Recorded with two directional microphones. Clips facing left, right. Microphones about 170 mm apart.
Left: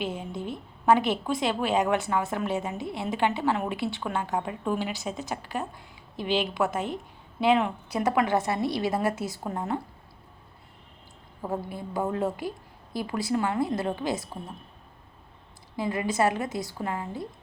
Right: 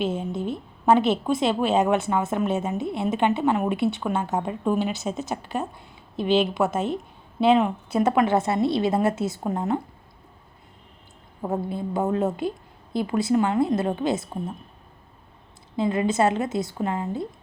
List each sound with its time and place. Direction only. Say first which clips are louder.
0.0 s a woman's voice: right 6 dB; 25° right (ahead or behind)
11.4 s a woman's voice: right 5 dB; 25° right (ahead or behind)
15.7 s a woman's voice: right 5 dB; 25° right (ahead or behind)